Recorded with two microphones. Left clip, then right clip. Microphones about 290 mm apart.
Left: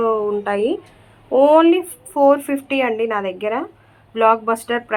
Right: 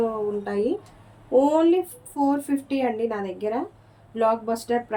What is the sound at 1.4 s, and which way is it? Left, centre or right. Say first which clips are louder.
Speech: left 13 dB; centre.